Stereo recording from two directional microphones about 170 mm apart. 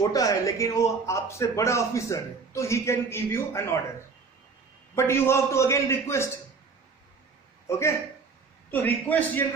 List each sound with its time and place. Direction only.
0.1 s a man's voice: 20° left (ahead or behind)
4.9 s a man's voice: 15° left (ahead or behind)
8.7 s a man's voice: 10° left (ahead or behind)